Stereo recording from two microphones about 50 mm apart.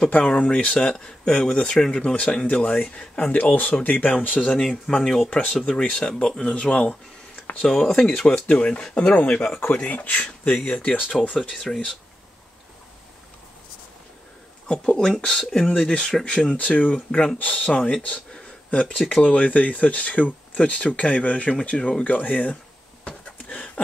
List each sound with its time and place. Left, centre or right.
0.2 s a man's voice: centre
4.6 s speech: centre
7.6 s speech: centre
9.8 s speech: left
11.5 s speech: centre
14.7 s speech: centre
16.5 s speech: left
18.0 s a sound: left
19.2 s speech: left
23.0 s a sound: left